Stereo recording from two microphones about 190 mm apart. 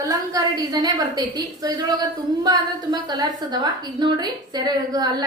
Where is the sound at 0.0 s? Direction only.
20° right (ahead or behind).